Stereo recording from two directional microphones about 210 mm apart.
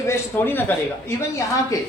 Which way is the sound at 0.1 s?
10° left (ahead or behind).